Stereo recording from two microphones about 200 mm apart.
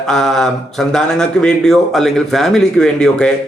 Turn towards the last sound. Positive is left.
turn(degrees=5)  # may be behind; listen again after turning